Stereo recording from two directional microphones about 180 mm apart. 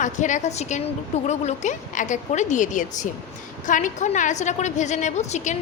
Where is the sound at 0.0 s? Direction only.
45° left (ahead or behind).